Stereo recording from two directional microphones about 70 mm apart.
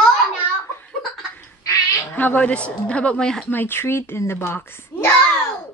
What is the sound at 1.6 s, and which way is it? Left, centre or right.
Goose, left.